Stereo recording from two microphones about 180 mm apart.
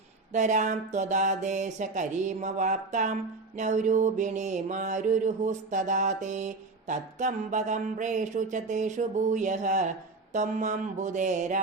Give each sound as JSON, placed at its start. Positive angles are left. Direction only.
{"t": 0.3, "sound": "mantra", "side_deg": -45}